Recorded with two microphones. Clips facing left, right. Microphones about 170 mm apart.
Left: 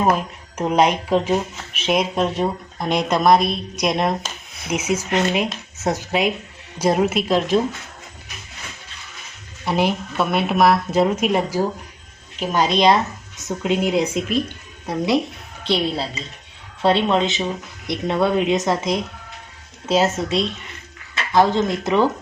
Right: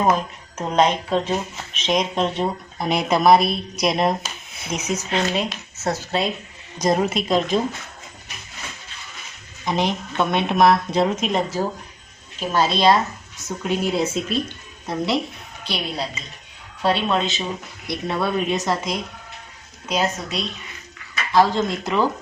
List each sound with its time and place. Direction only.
0.0 s a woman's voice: 10° left (ahead or behind)
9.6 s a woman's voice: 10° left (ahead or behind)
15.6 s speech: 25° left (ahead or behind)